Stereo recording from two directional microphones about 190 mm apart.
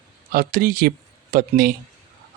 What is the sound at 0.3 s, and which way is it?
Speech, 50° right (ahead or behind).